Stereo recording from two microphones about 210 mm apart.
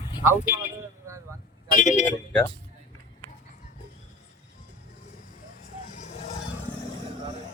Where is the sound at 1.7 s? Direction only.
40° left (ahead or behind).